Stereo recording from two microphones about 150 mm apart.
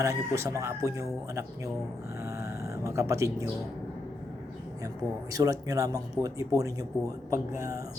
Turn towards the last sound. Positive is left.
turn(degrees=-20)  # may be behind; listen again after turning